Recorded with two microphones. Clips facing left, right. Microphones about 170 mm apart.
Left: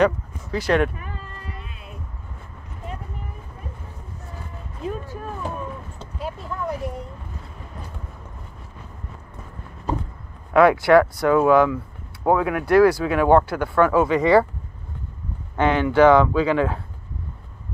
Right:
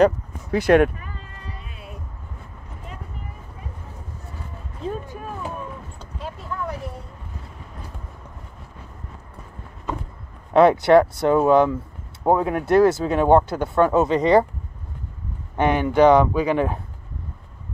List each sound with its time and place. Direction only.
0.5 s speech: 55° right (ahead or behind)
5.0 s a sound: 15° right (ahead or behind)
10.5 s speech: 20° right (ahead or behind)
15.5 s speech: 15° right (ahead or behind)